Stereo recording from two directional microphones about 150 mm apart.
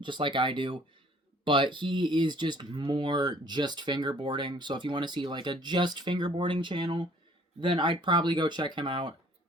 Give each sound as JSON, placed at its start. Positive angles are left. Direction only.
{"t": 0.0, "sound": "speech", "side_deg": -30}